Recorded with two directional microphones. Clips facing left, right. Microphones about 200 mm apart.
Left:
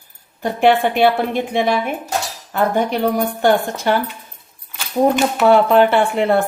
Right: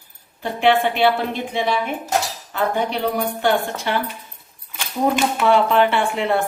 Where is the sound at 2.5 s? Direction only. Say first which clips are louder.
Left 4 dB; 45° left (ahead or behind).